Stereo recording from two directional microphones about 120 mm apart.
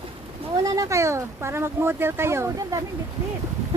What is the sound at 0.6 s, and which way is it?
Speech, 30° right (ahead or behind).